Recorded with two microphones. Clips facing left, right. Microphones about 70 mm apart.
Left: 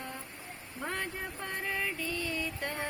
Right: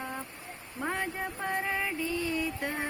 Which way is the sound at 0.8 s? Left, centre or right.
Centre.